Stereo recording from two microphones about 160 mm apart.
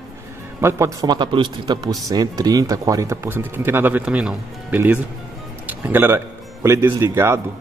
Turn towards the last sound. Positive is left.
turn(degrees=-15)  # may be behind; listen again after turning